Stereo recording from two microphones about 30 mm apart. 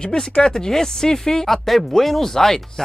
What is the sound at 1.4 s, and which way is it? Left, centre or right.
Speech, centre.